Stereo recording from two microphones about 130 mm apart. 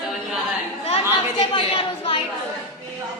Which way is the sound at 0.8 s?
50° left (ahead or behind).